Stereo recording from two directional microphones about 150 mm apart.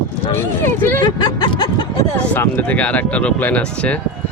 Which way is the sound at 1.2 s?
25° left (ahead or behind).